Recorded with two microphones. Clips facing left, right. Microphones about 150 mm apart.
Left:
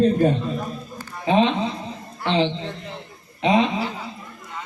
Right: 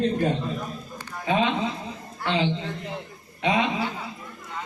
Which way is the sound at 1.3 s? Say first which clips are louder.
Left 4 dB; 25° left (ahead or behind).